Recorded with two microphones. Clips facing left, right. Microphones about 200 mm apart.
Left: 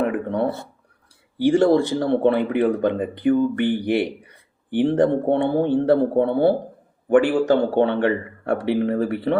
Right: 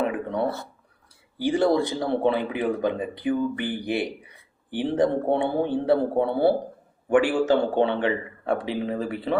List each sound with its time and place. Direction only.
0.0 s a sound: 60° left (ahead or behind)
1.4 s speech: 65° left (ahead or behind)
4.7 s speech: 50° left (ahead or behind)